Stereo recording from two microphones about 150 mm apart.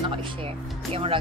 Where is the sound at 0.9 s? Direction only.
40° right (ahead or behind).